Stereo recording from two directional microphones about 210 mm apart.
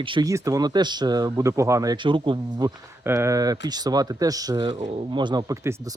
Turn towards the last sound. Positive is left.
turn(degrees=-15)  # may be behind; listen again after turning